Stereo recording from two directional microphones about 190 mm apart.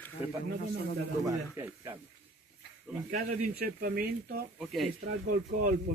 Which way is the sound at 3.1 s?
50° right (ahead or behind).